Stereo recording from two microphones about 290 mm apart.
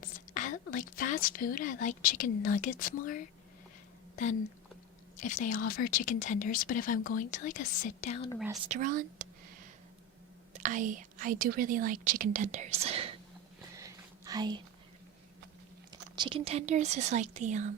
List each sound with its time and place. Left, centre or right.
0.0 s a woman's voice: left
5.1 s a woman's voice: left
8.7 s speech: right
10.5 s speech: right
13.7 s a sound: centre
15.9 s speech: centre